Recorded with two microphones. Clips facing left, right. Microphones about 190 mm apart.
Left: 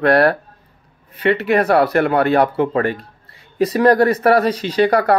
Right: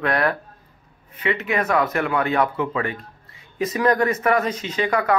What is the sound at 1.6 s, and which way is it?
Speech, 35° left (ahead or behind).